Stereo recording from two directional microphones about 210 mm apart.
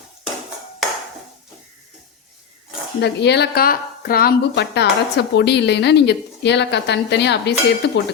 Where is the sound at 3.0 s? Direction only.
55° left (ahead or behind).